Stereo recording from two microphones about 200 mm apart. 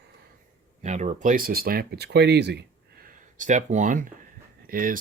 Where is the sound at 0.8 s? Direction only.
35° right (ahead or behind).